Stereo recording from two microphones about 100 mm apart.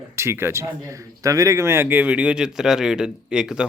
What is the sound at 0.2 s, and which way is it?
A man's voice, 25° right (ahead or behind).